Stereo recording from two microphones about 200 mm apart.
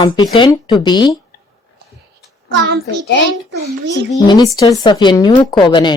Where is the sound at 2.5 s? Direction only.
65° right (ahead or behind).